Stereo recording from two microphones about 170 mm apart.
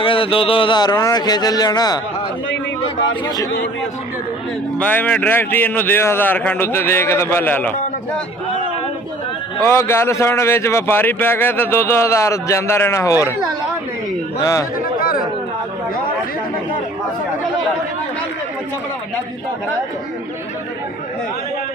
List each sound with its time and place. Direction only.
0.0 s speech: 30° left (ahead or behind)
4.7 s speech: 10° left (ahead or behind)
9.6 s speech: 15° left (ahead or behind)
14.4 s speech: 20° left (ahead or behind)